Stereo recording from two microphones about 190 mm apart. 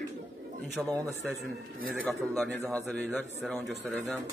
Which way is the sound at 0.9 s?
5° left (ahead or behind).